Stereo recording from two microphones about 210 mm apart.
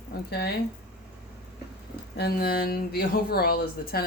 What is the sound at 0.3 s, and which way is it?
Speech, 50° left (ahead or behind).